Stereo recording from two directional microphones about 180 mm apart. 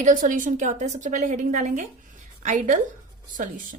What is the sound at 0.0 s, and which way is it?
A woman's voice, 45° right (ahead or behind).